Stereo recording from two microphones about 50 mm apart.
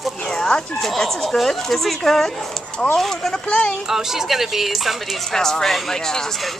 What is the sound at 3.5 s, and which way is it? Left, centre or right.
Speech, centre.